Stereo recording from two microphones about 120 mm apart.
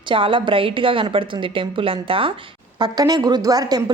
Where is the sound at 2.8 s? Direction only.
35° right (ahead or behind).